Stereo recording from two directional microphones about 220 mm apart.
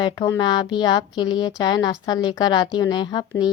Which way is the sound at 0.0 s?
20° left (ahead or behind).